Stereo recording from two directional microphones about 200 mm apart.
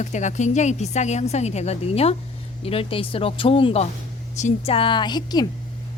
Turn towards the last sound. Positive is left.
turn(degrees=20)  # may be behind; listen again after turning